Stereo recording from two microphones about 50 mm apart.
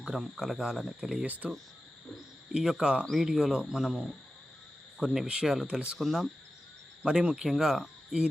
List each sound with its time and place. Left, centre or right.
0.1 s speech: centre
1.2 s speech: right
2.5 s speech: centre
5.2 s speech: centre
6.0 s speech: centre
7.0 s speech: centre